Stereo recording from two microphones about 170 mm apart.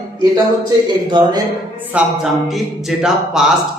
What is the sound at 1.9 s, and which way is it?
Speech, 5° right (ahead or behind).